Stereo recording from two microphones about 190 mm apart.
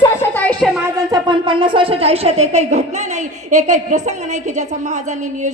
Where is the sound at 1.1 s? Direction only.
25° right (ahead or behind).